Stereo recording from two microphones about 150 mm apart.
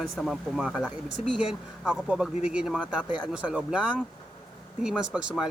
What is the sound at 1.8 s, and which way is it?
Speech, 5° right (ahead or behind).